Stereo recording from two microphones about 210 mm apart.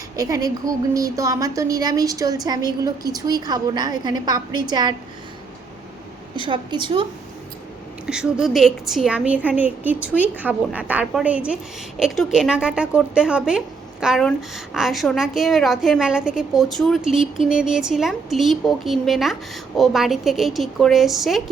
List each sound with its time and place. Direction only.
0.2 s a woman's voice: 15° right (ahead or behind)
6.3 s a woman's voice: 25° right (ahead or behind)
8.0 s a woman's voice: 5° right (ahead or behind)